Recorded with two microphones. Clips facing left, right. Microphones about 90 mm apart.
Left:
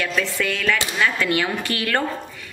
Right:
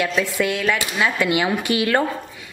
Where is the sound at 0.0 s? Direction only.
15° right (ahead or behind).